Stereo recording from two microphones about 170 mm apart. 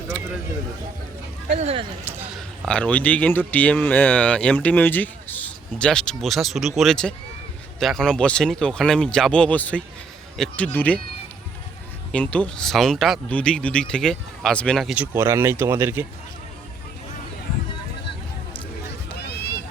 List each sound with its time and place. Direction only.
1.5 s speech: 35° right (ahead or behind)
2.0 s a sound: 10° right (ahead or behind)
2.6 s speech: 5° left (ahead or behind)
12.1 s speech: 5° left (ahead or behind)
14.9 s speech: 10° right (ahead or behind)
19.2 s a sound: 70° left (ahead or behind)